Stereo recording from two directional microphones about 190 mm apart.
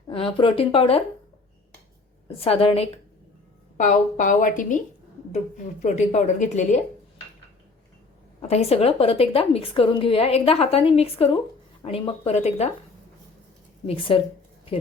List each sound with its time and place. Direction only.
0.1 s speech: 30° left (ahead or behind)
2.2 s a woman's voice: 30° left (ahead or behind)
3.8 s a woman's voice: 45° left (ahead or behind)
5.8 s a woman's voice: 40° left (ahead or behind)
8.4 s a woman's voice: 35° left (ahead or behind)
13.8 s speech: 30° left (ahead or behind)